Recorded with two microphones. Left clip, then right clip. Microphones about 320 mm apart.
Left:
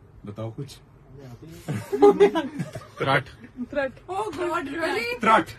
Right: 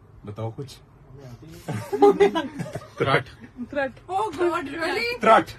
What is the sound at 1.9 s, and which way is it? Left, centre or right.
Speech, right.